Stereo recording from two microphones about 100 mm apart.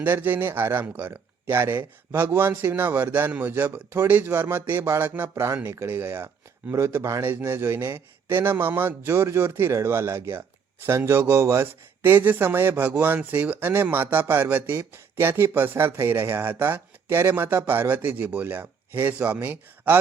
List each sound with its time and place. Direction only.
0.0 s speech: 20° right (ahead or behind)